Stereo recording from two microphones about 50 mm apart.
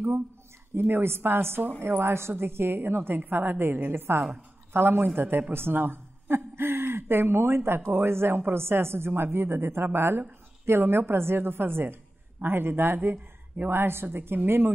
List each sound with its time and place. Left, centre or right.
0.7 s a woman's voice: right